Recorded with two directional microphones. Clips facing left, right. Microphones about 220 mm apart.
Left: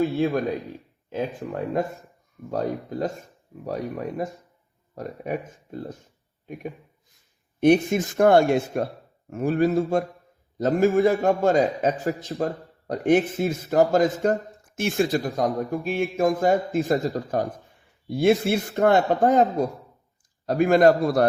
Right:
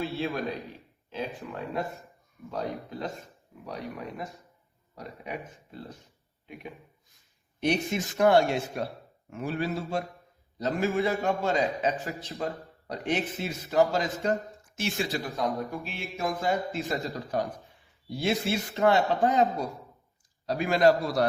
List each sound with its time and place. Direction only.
0.0 s a man's voice: 45° left (ahead or behind)